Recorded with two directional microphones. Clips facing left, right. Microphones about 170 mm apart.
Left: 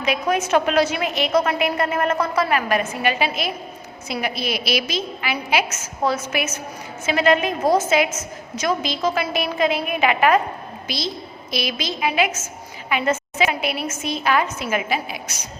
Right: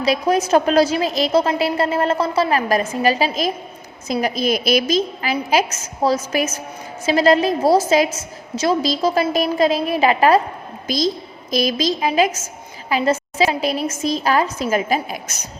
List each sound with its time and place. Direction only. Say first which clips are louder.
0.0 s a woman's voice: right 4 dB; 35° right (ahead or behind)